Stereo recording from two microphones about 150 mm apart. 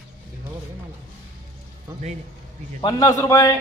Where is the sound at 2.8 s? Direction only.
25° left (ahead or behind).